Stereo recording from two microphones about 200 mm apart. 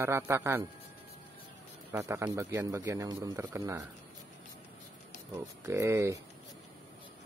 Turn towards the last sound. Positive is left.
turn(degrees=-15)  # may be behind; listen again after turning